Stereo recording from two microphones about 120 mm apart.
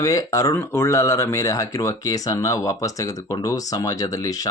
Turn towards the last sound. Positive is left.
turn(degrees=30)  # may be behind; listen again after turning